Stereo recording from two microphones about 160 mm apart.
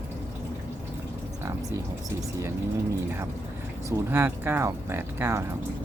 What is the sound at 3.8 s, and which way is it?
Speech, 15° right (ahead or behind).